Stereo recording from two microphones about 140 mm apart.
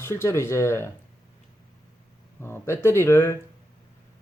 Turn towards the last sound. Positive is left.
turn(degrees=20)  # may be behind; listen again after turning